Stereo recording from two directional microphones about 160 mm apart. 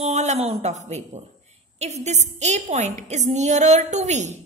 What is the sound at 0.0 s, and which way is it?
A woman's voice, 45° right (ahead or behind).